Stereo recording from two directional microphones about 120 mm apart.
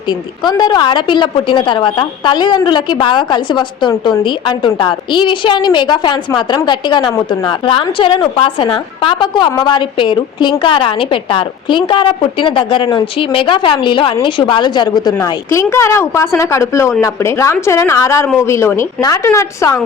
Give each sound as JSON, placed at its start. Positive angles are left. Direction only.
{"t": 0.1, "sound": "a woman's voice", "side_deg": 35}
{"t": 15.4, "sound": "a woman's voice", "side_deg": 20}